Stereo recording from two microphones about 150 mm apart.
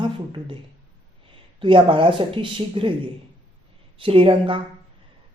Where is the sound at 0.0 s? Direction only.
35° right (ahead or behind).